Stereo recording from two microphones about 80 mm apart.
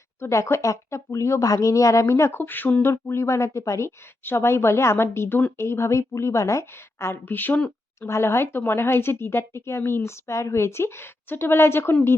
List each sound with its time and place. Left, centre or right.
0.2 s speech: left
2.4 s speech: left
2.8 s speech: left